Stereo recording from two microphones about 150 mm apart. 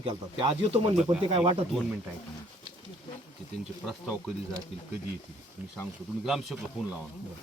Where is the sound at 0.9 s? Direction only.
5° right (ahead or behind).